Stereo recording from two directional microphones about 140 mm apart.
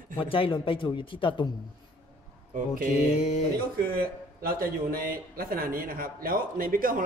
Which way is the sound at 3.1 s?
55° left (ahead or behind).